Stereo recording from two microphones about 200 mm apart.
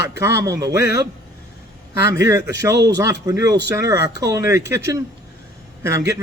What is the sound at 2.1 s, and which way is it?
Speech, 15° right (ahead or behind).